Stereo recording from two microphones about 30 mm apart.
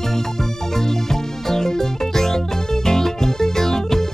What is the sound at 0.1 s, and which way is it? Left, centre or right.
Music, centre.